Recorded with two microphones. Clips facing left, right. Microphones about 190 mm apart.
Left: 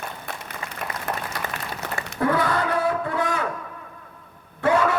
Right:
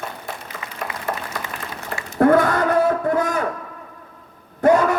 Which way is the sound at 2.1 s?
50° right (ahead or behind).